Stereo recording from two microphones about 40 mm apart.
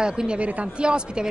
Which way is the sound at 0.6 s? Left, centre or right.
Right.